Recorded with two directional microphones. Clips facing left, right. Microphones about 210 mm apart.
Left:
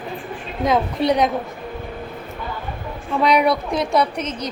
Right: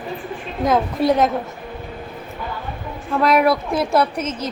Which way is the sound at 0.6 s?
Centre (ahead or behind).